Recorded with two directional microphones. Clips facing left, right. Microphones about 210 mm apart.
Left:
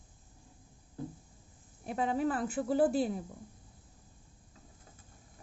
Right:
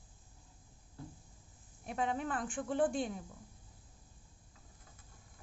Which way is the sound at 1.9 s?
5° left (ahead or behind).